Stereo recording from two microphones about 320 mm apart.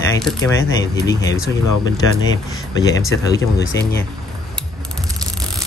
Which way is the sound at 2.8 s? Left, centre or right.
Centre.